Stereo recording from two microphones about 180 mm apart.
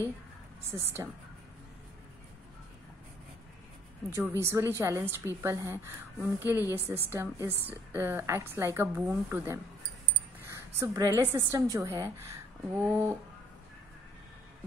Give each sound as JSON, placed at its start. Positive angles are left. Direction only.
{"t": 0.7, "sound": "a woman's voice", "side_deg": -15}
{"t": 4.1, "sound": "a woman's voice", "side_deg": -10}